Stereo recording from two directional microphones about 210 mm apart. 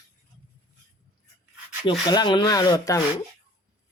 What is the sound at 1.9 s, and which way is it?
Speech, 20° left (ahead or behind).